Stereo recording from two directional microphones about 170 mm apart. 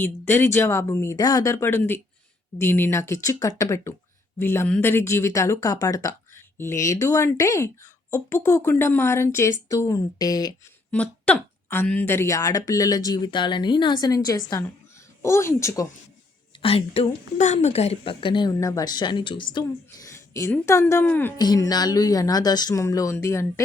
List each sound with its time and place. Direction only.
0.0 s speech: 15° left (ahead or behind)
10.9 s speech: 5° left (ahead or behind)
16.6 s speech: 35° left (ahead or behind)
20.1 s speech: 15° left (ahead or behind)
21.3 s speech: 25° left (ahead or behind)